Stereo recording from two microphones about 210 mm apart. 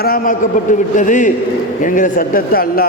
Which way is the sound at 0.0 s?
45° left (ahead or behind).